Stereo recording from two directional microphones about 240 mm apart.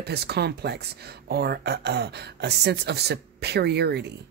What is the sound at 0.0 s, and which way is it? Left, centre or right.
Speech, right.